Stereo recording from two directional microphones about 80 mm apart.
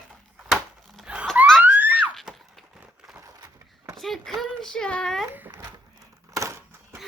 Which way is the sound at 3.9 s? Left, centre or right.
Centre.